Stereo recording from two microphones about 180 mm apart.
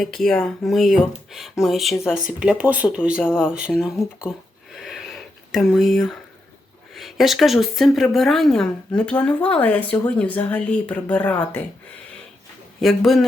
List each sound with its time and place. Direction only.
0.0 s speech: 5° left (ahead or behind)
4.7 s a sound: centre (ahead or behind)
6.9 s speech: centre (ahead or behind)
12.8 s speech: centre (ahead or behind)